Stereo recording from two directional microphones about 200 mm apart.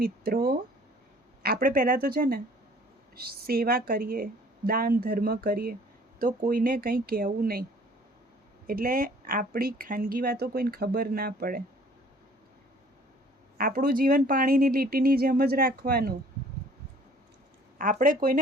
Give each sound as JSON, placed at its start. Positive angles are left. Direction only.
{"t": 0.0, "sound": "speech", "side_deg": -50}
{"t": 8.6, "sound": "speech", "side_deg": -45}
{"t": 13.6, "sound": "speech", "side_deg": -45}
{"t": 17.7, "sound": "speech", "side_deg": -45}